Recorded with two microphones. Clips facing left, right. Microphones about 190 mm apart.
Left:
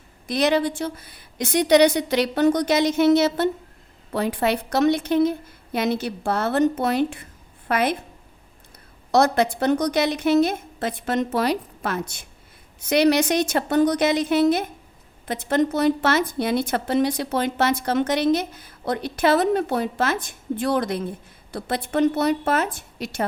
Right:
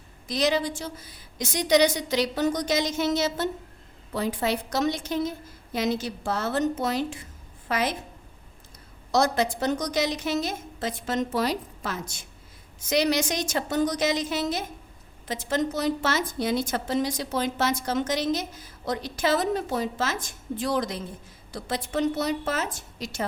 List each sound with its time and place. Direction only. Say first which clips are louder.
0.3 s a woman's voice: left 4 dB; 60° left (ahead or behind)
9.1 s a woman's voice: left 5 dB; 60° left (ahead or behind)